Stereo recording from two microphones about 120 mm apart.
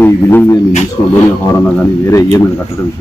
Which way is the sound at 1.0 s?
30° left (ahead or behind).